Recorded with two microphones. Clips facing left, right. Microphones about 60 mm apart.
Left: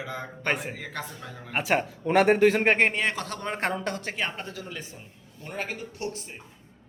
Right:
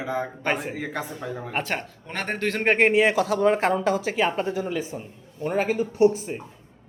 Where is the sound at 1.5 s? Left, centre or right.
Centre.